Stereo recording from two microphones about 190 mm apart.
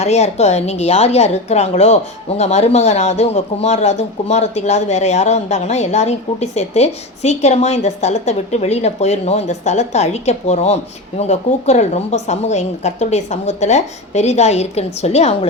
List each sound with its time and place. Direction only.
0.0 s speech: 35° left (ahead or behind)